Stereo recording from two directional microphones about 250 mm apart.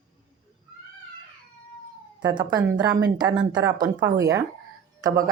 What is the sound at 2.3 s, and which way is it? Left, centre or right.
Speech, centre.